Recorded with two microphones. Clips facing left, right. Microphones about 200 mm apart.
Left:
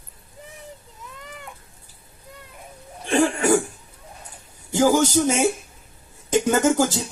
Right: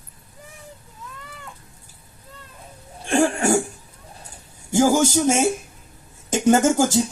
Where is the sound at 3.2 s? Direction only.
50° right (ahead or behind).